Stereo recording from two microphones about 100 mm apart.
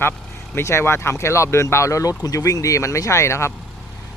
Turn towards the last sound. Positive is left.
turn(degrees=30)  # may be behind; listen again after turning